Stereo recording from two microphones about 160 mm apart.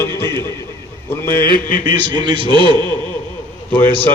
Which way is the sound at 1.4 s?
65° left (ahead or behind).